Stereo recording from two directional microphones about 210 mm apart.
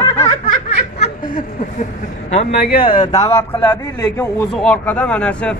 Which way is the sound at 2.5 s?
50° left (ahead or behind).